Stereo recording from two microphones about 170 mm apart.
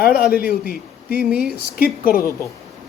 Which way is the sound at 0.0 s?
60° left (ahead or behind).